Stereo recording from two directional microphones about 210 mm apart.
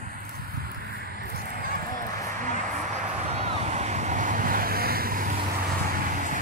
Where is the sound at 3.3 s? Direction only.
30° right (ahead or behind).